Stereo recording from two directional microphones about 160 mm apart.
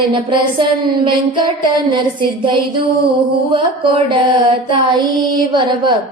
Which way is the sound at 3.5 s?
30° right (ahead or behind).